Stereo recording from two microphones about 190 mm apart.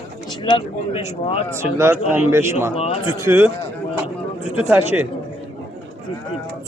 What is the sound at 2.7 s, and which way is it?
Speech, 30° left (ahead or behind).